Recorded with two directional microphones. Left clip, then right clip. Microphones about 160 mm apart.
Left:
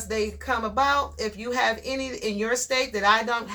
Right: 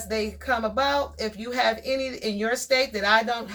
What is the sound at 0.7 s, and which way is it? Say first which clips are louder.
Speech: left 1 dB; 30° left (ahead or behind).